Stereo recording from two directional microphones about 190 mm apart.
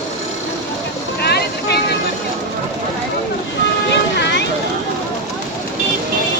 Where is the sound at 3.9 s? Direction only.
65° left (ahead or behind).